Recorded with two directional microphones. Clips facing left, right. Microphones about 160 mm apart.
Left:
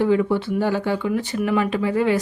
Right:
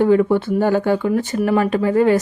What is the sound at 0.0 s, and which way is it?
Speech, 50° right (ahead or behind).